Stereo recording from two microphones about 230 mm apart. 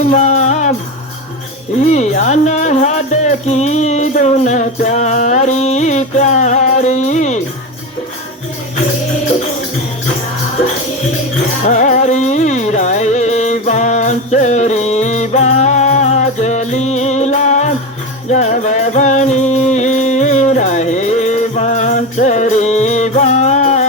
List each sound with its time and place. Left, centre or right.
0.0 s music: left
1.8 s speech: left
11.6 s music: left